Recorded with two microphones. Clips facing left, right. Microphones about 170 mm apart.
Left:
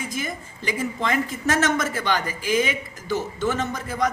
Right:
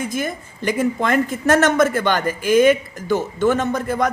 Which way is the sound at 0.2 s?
55° right (ahead or behind).